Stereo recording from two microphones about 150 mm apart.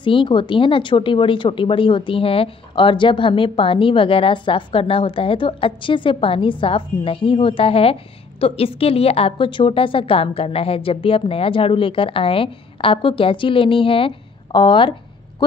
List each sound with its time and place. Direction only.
0.0 s speech: 35° left (ahead or behind)